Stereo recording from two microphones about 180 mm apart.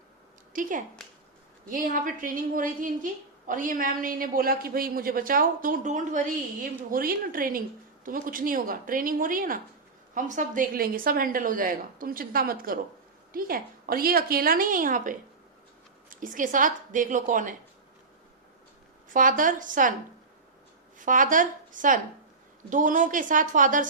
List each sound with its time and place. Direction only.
0.5 s a woman's voice: 45° right (ahead or behind)
19.1 s a woman's voice: 50° right (ahead or behind)
21.0 s a woman's voice: 45° right (ahead or behind)